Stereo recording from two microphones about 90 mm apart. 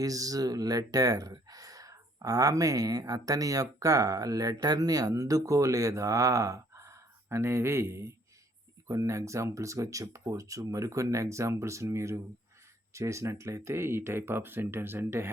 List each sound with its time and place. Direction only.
0.0 s speech: 40° right (ahead or behind); by 15.3 s 25° right (ahead or behind)